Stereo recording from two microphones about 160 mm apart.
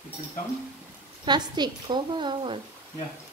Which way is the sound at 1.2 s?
25° right (ahead or behind).